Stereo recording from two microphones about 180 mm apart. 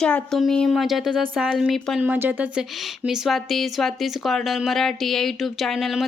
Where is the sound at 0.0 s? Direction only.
5° left (ahead or behind).